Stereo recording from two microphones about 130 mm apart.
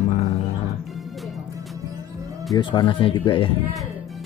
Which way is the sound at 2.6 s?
40° left (ahead or behind).